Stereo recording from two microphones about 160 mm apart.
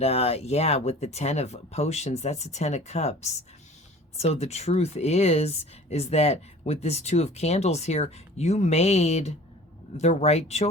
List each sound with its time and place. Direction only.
0.0 s speech: 40° left (ahead or behind)